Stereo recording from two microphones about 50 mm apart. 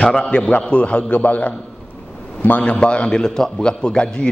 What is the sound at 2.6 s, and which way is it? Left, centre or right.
A man's voice, left.